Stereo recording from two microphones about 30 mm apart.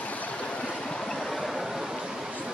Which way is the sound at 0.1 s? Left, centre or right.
Left.